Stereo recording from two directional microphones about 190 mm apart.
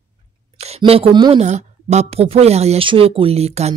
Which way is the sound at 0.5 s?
35° right (ahead or behind).